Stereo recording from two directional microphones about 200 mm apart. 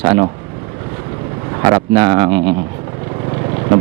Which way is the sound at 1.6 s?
20° right (ahead or behind).